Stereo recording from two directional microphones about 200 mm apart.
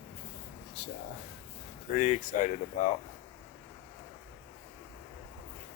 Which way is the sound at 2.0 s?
35° left (ahead or behind).